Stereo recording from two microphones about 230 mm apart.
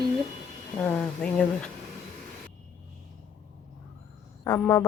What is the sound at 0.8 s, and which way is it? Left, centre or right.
Speech, centre.